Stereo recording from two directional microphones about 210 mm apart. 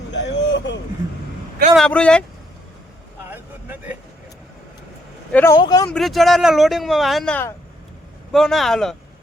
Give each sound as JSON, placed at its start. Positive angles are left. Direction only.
{"t": 0.1, "sound": "a sound", "side_deg": 55}
{"t": 1.7, "sound": "speech", "side_deg": 5}
{"t": 3.2, "sound": "vehicle", "side_deg": -10}
{"t": 5.3, "sound": "speech", "side_deg": 10}
{"t": 5.9, "sound": "speech", "side_deg": 0}